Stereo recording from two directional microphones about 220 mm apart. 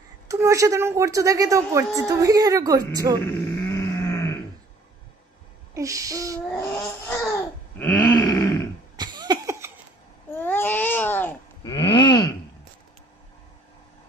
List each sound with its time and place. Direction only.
0.3 s speech: 15° right (ahead or behind)
3.3 s grunt: 15° left (ahead or behind)
5.8 s a sound: 15° right (ahead or behind)
6.5 s babbling: 10° left (ahead or behind)
8.1 s grunt: 15° left (ahead or behind)
8.9 s cough: 20° right (ahead or behind)
10.4 s a sound: 10° left (ahead or behind)
11.7 s groan: 20° left (ahead or behind)